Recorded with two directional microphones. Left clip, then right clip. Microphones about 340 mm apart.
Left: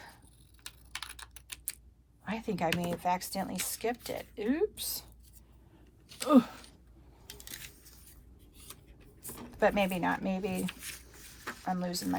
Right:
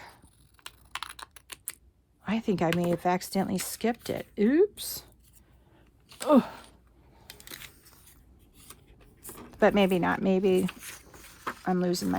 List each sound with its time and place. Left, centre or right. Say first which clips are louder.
2.2 s speech: right 5 dB; right
6.2 s speech: right 3 dB; right
7.4 s a sound: right 3 dB; centre